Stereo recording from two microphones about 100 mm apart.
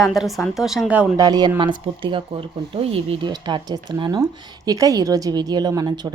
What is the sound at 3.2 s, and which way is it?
Speech, 45° right (ahead or behind).